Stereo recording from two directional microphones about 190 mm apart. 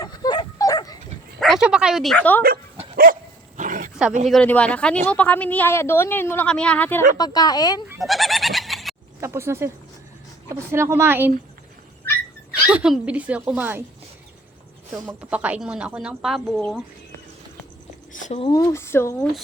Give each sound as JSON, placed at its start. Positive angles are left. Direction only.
{"t": 0.0, "sound": "dog", "side_deg": 20}
{"t": 1.4, "sound": "speech", "side_deg": 0}
{"t": 2.9, "sound": "dog", "side_deg": -50}
{"t": 4.3, "sound": "speech", "side_deg": 5}
{"t": 7.2, "sound": "speech", "side_deg": 20}
{"t": 7.9, "sound": "goat", "side_deg": 0}
{"t": 9.2, "sound": "speech", "side_deg": -15}
{"t": 12.6, "sound": "speech", "side_deg": -5}
{"t": 15.0, "sound": "speech", "side_deg": -5}
{"t": 18.1, "sound": "a sound", "side_deg": 40}
{"t": 18.7, "sound": "speech", "side_deg": 15}